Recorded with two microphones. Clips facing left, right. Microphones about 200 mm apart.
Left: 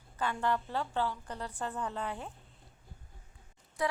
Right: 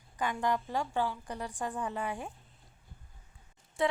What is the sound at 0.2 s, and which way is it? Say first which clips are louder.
A woman's voice: right 1 dB; 15° right (ahead or behind).